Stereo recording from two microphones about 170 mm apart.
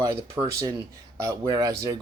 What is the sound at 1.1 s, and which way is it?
Speech, 20° right (ahead or behind).